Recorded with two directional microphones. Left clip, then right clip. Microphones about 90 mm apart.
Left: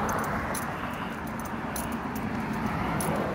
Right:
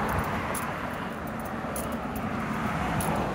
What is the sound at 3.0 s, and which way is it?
Vehicle, 5° right (ahead or behind).